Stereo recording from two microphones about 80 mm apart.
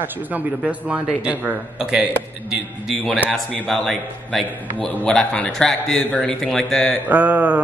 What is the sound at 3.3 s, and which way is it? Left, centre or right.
Speech, centre.